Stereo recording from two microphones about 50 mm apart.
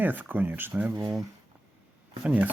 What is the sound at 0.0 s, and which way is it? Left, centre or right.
Speech, right.